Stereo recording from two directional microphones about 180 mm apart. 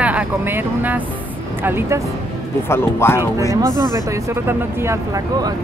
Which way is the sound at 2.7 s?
15° left (ahead or behind).